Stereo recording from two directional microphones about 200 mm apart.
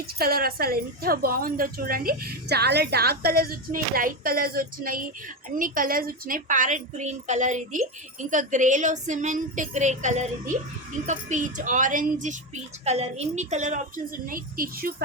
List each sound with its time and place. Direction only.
0.2 s a woman's voice: 50° right (ahead or behind)